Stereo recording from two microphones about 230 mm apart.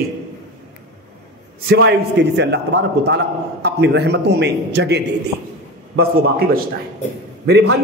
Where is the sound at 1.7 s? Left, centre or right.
Right.